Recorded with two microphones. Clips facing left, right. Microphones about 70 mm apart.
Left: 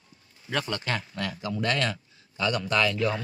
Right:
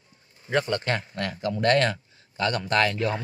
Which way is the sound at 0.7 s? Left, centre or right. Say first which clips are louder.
Right 4 dB; right.